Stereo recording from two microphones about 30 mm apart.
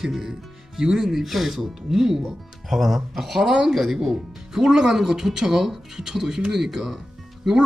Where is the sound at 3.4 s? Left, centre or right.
Centre.